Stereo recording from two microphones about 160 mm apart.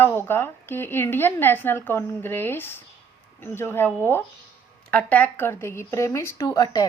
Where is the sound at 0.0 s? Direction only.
15° left (ahead or behind).